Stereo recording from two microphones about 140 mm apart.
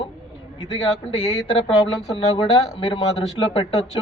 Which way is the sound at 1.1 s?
45° left (ahead or behind).